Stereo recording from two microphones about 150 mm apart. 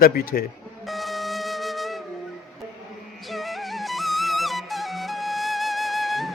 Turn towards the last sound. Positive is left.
turn(degrees=0)  # may be behind; listen again after turning